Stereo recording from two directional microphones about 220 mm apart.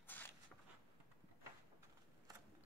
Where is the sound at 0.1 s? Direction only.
10° left (ahead or behind).